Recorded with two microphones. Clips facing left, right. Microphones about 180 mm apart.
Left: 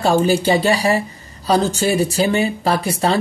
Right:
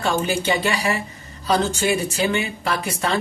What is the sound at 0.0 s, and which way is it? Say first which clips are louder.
A woman's voice: left 7 dB; 35° left (ahead or behind).